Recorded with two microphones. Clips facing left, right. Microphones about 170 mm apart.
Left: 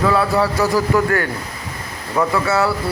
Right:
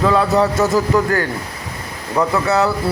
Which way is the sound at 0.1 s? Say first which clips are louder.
Right 2 dB; 20° right (ahead or behind).